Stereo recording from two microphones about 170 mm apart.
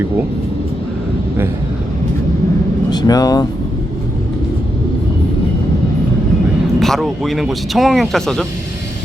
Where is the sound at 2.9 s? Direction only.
25° left (ahead or behind).